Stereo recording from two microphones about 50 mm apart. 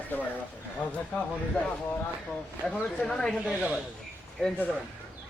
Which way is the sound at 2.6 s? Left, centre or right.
Centre.